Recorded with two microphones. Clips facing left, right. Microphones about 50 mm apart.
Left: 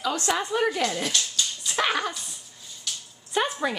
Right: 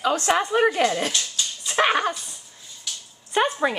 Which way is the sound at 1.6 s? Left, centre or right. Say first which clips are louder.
Right 6 dB; right.